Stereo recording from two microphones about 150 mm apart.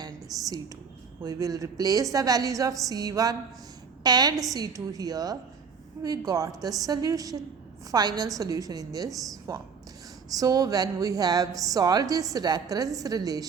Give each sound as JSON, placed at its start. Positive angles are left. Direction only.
{"t": 0.3, "sound": "a woman's voice", "side_deg": 0}
{"t": 1.2, "sound": "a woman's voice", "side_deg": -25}